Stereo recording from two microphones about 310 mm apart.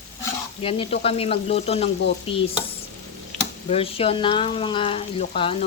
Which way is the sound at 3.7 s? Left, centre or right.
Centre.